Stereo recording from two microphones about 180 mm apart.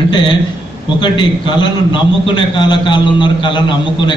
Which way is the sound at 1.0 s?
25° left (ahead or behind).